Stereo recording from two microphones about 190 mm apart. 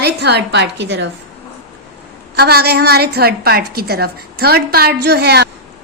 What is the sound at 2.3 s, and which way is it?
A woman's voice, 55° right (ahead or behind).